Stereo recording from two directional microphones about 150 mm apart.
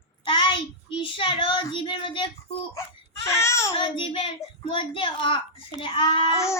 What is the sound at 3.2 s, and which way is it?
Speech, 20° left (ahead or behind).